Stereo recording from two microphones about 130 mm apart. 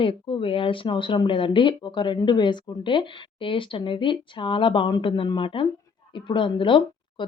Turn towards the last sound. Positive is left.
turn(degrees=40)  # may be behind; listen again after turning